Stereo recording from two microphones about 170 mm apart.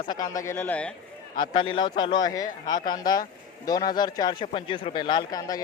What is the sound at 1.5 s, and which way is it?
A man's voice, 30° left (ahead or behind).